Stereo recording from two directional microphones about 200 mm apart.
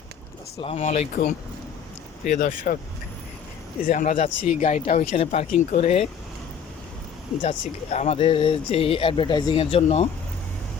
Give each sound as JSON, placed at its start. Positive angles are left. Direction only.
{"t": 0.6, "sound": "speech", "side_deg": 30}
{"t": 3.8, "sound": "speech", "side_deg": 40}
{"t": 7.4, "sound": "speech", "side_deg": 35}